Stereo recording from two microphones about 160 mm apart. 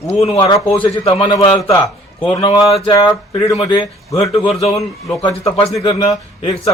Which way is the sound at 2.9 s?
25° left (ahead or behind).